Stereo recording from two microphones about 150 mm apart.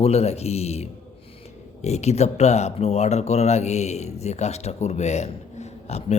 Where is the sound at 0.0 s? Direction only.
45° left (ahead or behind).